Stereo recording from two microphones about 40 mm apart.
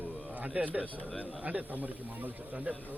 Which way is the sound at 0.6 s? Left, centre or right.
Right.